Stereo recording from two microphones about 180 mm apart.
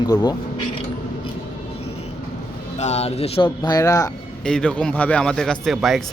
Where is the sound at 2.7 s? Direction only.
40° left (ahead or behind); by 4.1 s 20° left (ahead or behind).